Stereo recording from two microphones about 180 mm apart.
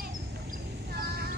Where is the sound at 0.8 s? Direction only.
60° right (ahead or behind).